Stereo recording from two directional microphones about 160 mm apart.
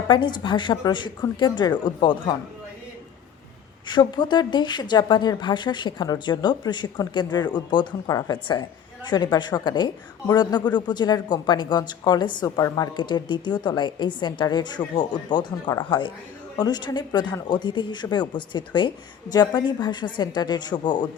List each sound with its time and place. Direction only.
0.1 s speech: 30° left (ahead or behind)
3.8 s speech: 30° left (ahead or behind)